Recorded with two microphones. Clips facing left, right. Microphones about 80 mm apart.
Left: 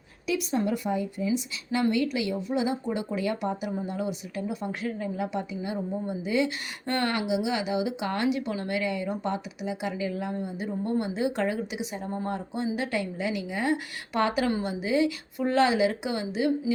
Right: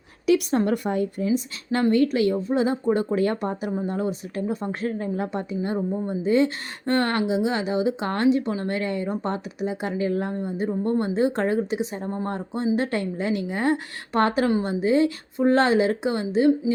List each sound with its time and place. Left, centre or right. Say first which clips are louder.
0.3 s a woman's voice: right 7 dB; right
1.8 s speech: right 7 dB; right